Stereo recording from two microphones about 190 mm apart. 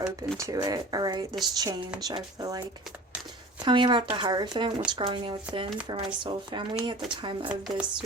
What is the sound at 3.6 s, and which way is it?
Speech, 25° right (ahead or behind).